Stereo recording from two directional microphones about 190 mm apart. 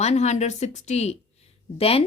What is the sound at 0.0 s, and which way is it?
A woman's voice, 35° left (ahead or behind).